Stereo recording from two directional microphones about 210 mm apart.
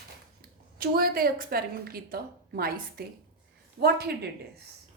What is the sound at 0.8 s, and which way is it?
A woman's voice, 45° right (ahead or behind).